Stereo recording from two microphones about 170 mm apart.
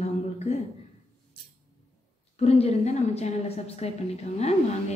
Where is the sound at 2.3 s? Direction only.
35° left (ahead or behind).